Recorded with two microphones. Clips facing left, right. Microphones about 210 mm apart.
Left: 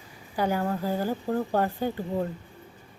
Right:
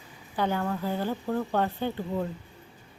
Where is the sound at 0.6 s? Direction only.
35° left (ahead or behind).